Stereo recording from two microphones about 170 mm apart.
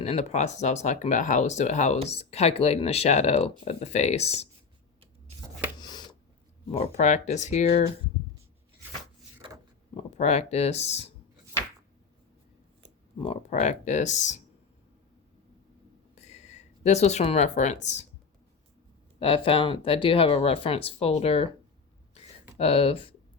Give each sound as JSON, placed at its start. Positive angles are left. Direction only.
{"t": 0.0, "sound": "speech", "side_deg": 40}
{"t": 5.8, "sound": "a sound", "side_deg": 25}
{"t": 6.7, "sound": "speech", "side_deg": 40}
{"t": 9.4, "sound": "a sound", "side_deg": -30}
{"t": 9.9, "sound": "speech", "side_deg": 40}
{"t": 13.1, "sound": "speech", "side_deg": 35}
{"t": 16.1, "sound": "speech", "side_deg": 40}
{"t": 19.2, "sound": "speech", "side_deg": 30}
{"t": 22.5, "sound": "speech", "side_deg": 35}